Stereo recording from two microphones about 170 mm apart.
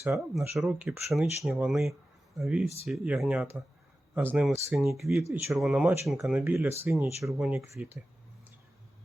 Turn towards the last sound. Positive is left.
turn(degrees=-15)  # may be behind; listen again after turning